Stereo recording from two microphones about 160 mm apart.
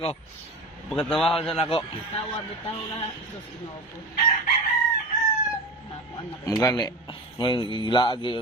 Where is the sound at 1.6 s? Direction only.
35° left (ahead or behind).